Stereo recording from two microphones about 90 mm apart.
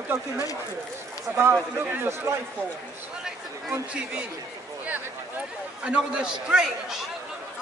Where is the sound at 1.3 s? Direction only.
25° right (ahead or behind).